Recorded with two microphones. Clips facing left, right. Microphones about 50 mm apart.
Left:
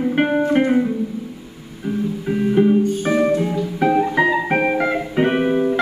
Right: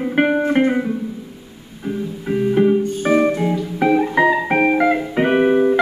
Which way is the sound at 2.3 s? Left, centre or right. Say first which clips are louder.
Right 1 dB; centre.